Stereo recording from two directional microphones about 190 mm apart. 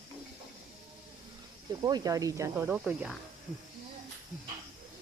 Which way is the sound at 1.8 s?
20° right (ahead or behind).